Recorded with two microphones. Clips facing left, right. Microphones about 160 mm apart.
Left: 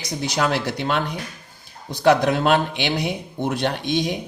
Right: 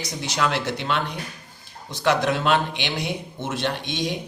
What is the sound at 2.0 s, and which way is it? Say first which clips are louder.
Speech: left 4 dB; 45° left (ahead or behind).